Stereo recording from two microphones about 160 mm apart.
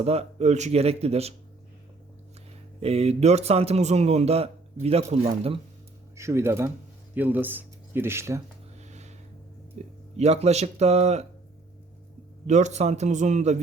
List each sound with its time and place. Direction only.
0.0 s a man's voice: 40° right (ahead or behind)
2.8 s a man's voice: 40° right (ahead or behind)
6.1 s speech: 15° right (ahead or behind)
8.8 s a sound: 45° right (ahead or behind)
10.2 s a man's voice: 40° right (ahead or behind)
12.5 s a man's voice: 45° right (ahead or behind)